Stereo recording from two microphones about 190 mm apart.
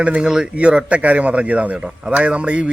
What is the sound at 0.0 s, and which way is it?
A man's voice, 5° right (ahead or behind).